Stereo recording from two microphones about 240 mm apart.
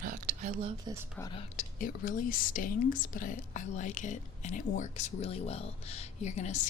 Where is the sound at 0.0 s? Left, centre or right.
Right.